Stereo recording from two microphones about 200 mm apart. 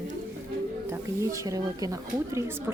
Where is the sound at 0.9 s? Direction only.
15° right (ahead or behind).